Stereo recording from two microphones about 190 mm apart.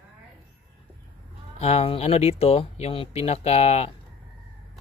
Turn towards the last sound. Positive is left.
turn(degrees=35)  # may be behind; listen again after turning